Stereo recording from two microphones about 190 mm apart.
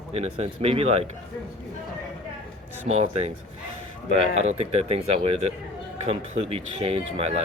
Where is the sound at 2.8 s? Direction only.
35° right (ahead or behind).